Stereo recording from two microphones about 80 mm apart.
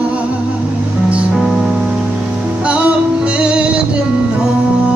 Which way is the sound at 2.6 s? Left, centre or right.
Centre.